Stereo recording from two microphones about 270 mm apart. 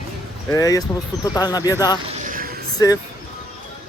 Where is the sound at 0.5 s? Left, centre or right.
Centre.